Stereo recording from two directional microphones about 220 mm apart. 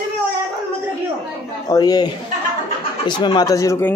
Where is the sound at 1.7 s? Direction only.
20° left (ahead or behind).